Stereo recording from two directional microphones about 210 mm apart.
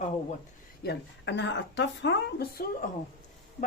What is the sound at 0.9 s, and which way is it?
Speech, 60° left (ahead or behind).